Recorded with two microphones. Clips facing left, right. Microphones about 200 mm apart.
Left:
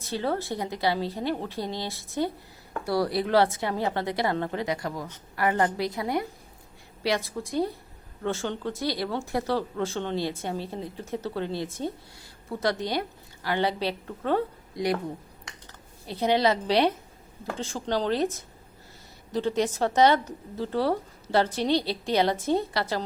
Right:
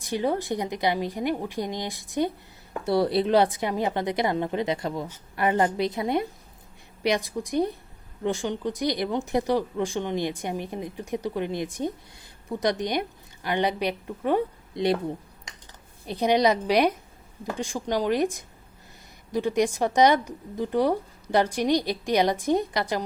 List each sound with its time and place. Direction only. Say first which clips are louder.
0.0 s a woman's voice: right 3 dB; 15° right (ahead or behind)
16.0 s speech: right 2 dB; 15° right (ahead or behind)